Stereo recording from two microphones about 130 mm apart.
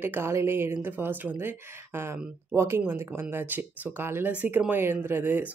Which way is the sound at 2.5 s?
20° right (ahead or behind).